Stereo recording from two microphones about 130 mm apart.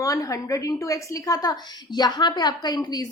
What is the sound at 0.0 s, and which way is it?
A woman's voice, 25° left (ahead or behind).